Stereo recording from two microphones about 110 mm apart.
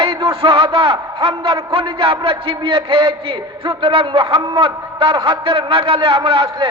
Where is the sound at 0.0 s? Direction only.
55° right (ahead or behind).